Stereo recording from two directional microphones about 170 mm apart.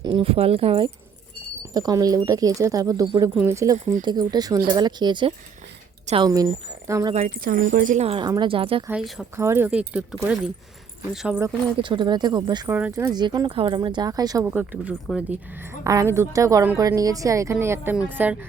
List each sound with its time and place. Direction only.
0.0 s speech: 30° right (ahead or behind)
1.7 s a woman's voice: 20° right (ahead or behind)
7.1 s speech: 50° right (ahead or behind); by 8.8 s 30° right (ahead or behind)
8.9 s speech: 5° right (ahead or behind)
9.3 s speech: 15° right (ahead or behind)
11.8 s a woman's voice: 30° right (ahead or behind)
12.6 s speech: 10° right (ahead or behind)
13.1 s a woman's voice: 25° right (ahead or behind)